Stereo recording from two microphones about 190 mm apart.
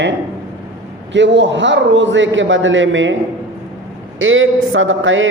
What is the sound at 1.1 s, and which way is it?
A man's voice, 70° right (ahead or behind).